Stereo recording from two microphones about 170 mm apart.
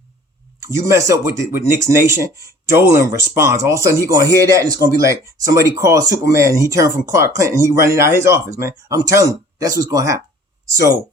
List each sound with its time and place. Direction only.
0.7 s speech: 15° right (ahead or behind)